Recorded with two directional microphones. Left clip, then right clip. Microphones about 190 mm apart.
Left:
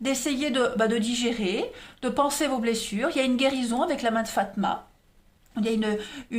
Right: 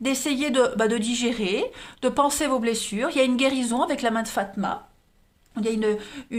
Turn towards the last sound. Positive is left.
turn(degrees=-20)  # may be behind; listen again after turning